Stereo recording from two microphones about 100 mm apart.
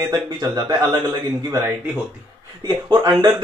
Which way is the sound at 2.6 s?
45° right (ahead or behind).